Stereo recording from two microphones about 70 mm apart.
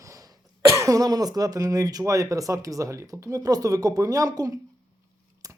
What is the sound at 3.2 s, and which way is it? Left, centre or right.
Speech, right.